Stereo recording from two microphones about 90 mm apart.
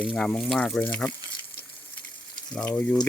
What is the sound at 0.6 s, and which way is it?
Speech, 10° left (ahead or behind).